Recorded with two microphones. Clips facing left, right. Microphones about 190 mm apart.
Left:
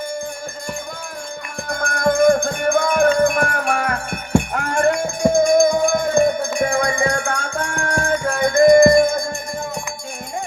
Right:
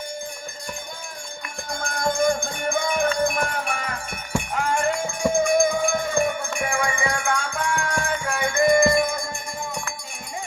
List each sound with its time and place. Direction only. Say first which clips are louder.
1.6 s music: left 6 dB; 60° left (ahead or behind)
4.9 s a sound: left 6 dB; 40° left (ahead or behind)
7.3 s music: left 1 dB; 55° left (ahead or behind)
8.3 s music: left 8 dB; 40° left (ahead or behind)